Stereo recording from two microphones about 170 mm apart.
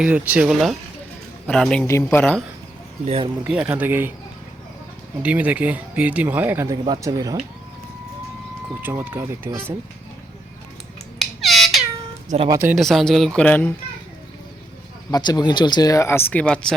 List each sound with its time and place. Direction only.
0.0 s speech: 10° right (ahead or behind)
1.9 s a man's voice: 15° left (ahead or behind)
3.0 s speech: 40° right (ahead or behind)
3.4 s speech: 10° right (ahead or behind)
5.2 s speech: 10° right (ahead or behind)
6.8 s speech: 25° right (ahead or behind)
8.8 s speech: 10° right (ahead or behind)
11.2 s a sound: centre (ahead or behind)
12.3 s speech: 45° right (ahead or behind)
12.7 s speech: centre (ahead or behind)
15.1 s speech: 25° left (ahead or behind); by 16.7 s 5° left (ahead or behind)